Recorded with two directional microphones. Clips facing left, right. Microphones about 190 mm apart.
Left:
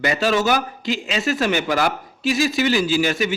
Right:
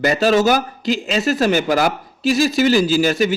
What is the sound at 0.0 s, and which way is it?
A man's voice, 40° right (ahead or behind).